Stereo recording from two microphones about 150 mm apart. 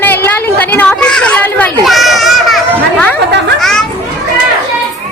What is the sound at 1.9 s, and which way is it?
Children playing, centre (ahead or behind).